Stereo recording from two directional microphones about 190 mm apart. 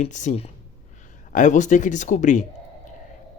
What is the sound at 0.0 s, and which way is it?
Speech, 40° left (ahead or behind).